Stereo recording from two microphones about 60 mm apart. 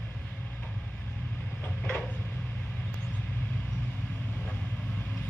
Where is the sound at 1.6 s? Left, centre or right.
Centre.